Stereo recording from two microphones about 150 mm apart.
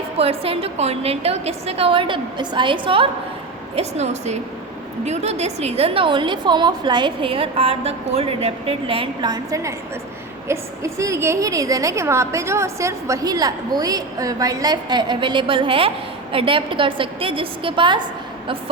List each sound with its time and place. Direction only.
0.2 s a woman's voice: 40° right (ahead or behind)
3.8 s a woman's voice: 45° right (ahead or behind)